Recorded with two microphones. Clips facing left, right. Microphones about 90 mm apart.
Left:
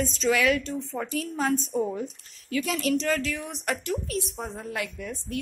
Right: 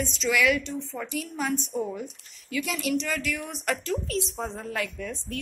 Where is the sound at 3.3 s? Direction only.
20° left (ahead or behind).